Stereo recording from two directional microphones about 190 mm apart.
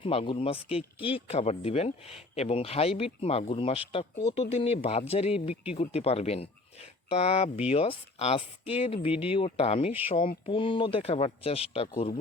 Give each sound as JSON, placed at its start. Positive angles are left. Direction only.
{"t": 0.0, "sound": "speech", "side_deg": 30}